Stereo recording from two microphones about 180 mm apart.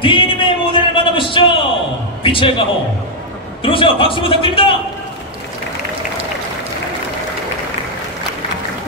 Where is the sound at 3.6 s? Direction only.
30° left (ahead or behind).